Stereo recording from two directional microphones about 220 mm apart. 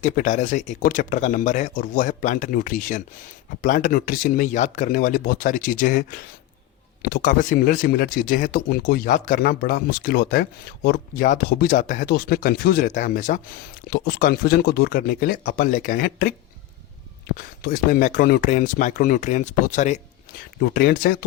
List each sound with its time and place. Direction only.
0.0 s speech: 35° left (ahead or behind)
13.9 s speech: 45° left (ahead or behind)
17.3 s speech: 40° left (ahead or behind)